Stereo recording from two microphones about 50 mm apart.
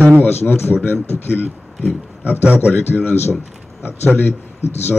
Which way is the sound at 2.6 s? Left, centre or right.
Left.